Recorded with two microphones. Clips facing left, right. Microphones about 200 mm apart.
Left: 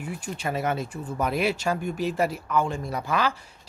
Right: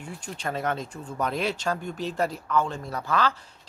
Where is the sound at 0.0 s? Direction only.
10° left (ahead or behind).